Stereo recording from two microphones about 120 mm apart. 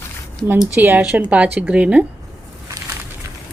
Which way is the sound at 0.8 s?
15° right (ahead or behind).